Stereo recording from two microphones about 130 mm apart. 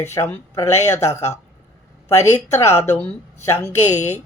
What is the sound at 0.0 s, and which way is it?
Speech, 20° left (ahead or behind).